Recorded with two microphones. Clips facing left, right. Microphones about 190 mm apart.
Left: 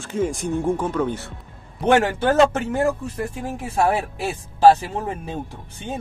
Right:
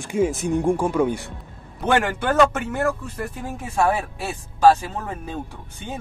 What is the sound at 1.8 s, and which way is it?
Speech, 30° left (ahead or behind).